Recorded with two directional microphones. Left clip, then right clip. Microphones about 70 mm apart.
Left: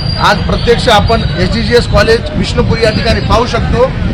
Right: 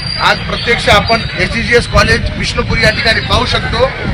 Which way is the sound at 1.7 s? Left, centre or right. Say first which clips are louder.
Left 2 dB; centre.